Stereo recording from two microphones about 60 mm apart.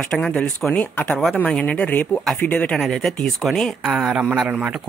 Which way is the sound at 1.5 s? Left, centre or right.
Left.